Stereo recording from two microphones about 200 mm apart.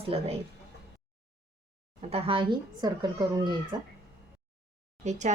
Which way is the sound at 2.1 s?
30° right (ahead or behind).